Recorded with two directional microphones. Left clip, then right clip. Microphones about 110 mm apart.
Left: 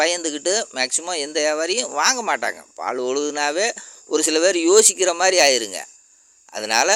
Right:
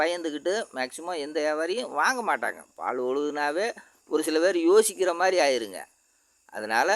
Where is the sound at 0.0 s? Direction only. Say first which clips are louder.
Left 6 dB; 20° left (ahead or behind).